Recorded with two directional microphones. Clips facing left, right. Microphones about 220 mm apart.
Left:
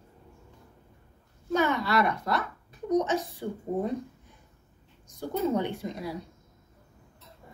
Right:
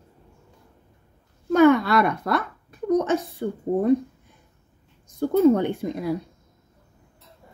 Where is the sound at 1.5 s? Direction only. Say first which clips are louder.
Right 10 dB; 55° right (ahead or behind).